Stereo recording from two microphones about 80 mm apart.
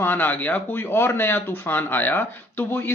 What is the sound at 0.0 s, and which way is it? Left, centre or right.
Speech, left.